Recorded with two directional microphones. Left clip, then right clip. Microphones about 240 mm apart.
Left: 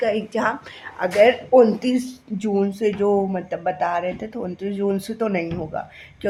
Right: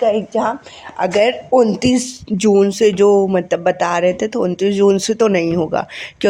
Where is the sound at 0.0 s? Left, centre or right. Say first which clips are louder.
Right 6 dB; centre.